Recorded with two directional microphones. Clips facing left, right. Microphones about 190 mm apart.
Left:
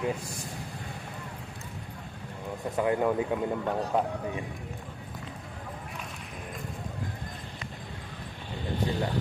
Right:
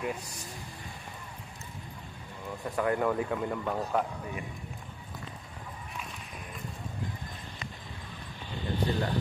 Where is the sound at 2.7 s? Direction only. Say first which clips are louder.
Left 2 dB; 20° left (ahead or behind).